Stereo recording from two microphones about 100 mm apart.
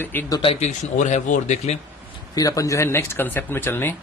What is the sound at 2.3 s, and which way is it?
Speech, 35° left (ahead or behind).